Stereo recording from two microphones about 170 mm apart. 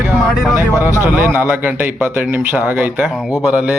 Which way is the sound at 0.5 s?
15° right (ahead or behind).